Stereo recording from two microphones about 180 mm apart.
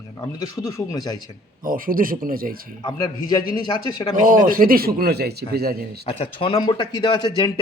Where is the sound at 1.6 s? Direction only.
50° right (ahead or behind).